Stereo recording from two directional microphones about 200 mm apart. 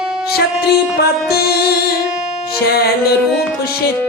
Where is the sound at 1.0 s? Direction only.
50° left (ahead or behind).